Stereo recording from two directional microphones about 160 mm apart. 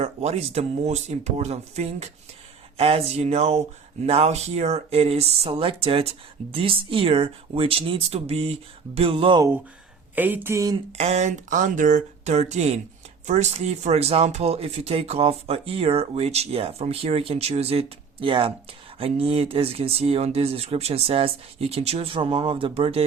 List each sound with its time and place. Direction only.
0.0 s speech: 45° right (ahead or behind)
10.2 s speech: 10° right (ahead or behind)
10.9 s speech: 45° right (ahead or behind)